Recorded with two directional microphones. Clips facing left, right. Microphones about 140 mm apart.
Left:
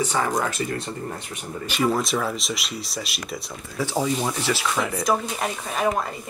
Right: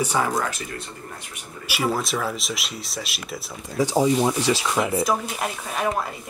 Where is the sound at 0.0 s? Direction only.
10° right (ahead or behind).